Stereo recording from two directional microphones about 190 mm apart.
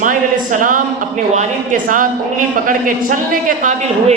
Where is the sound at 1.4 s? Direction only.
45° right (ahead or behind).